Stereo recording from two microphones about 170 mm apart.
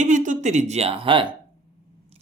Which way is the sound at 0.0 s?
45° right (ahead or behind).